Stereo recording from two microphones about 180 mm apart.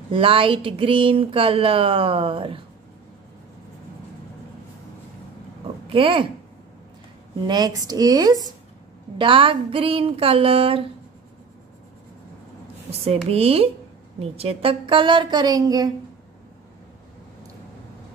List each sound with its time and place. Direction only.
0.1 s speech: 30° right (ahead or behind)
5.9 s speech: 30° right (ahead or behind)
7.4 s a woman's voice: 20° right (ahead or behind)
13.3 s a woman's voice: 35° right (ahead or behind)